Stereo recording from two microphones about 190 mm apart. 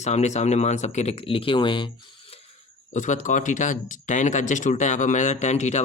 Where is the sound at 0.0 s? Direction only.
35° left (ahead or behind).